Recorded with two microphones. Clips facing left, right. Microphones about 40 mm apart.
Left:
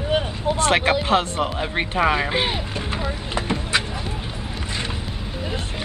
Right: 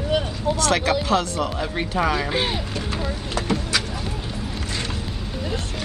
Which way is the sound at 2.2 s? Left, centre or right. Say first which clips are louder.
Left 1 dB; centre.